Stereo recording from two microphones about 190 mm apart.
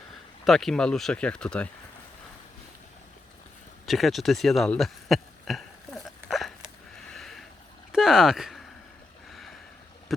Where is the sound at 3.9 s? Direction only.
Centre (ahead or behind).